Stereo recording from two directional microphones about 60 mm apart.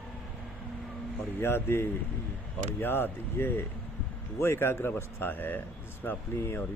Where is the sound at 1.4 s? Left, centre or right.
Left.